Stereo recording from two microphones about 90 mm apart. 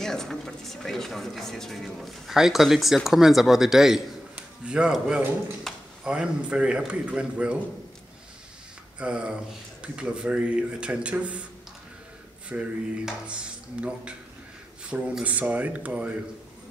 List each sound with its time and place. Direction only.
0.0 s a man's voice: 5° left (ahead or behind)
5.7 s a sound: 5° left (ahead or behind)
6.0 s a man's voice: 10° right (ahead or behind)
9.0 s a man's voice: 10° right (ahead or behind)
12.4 s a man's voice: 10° right (ahead or behind)